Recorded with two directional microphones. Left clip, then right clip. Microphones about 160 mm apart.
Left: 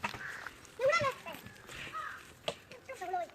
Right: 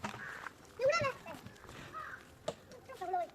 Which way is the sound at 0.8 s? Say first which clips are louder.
Left 2 dB; 55° left (ahead or behind).